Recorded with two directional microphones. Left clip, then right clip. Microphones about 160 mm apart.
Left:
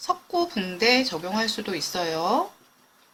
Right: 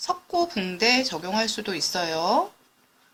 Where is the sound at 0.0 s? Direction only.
30° right (ahead or behind).